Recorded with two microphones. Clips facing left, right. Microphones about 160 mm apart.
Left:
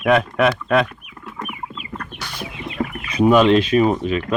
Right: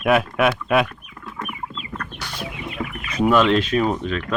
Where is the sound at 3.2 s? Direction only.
15° left (ahead or behind).